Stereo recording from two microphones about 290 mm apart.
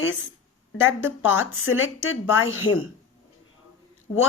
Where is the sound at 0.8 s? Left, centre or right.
Left.